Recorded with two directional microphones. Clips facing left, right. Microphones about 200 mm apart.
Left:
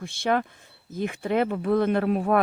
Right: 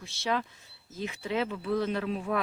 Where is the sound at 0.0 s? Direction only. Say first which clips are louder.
Left 6 dB; 55° left (ahead or behind).